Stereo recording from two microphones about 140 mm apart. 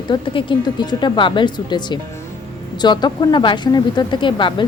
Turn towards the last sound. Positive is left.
turn(degrees=35)  # may be behind; listen again after turning